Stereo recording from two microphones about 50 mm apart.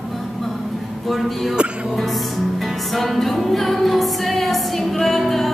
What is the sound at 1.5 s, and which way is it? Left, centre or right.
Music, right.